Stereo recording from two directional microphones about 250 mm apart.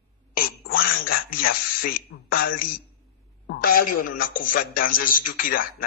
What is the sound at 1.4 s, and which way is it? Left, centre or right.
A man's voice, left.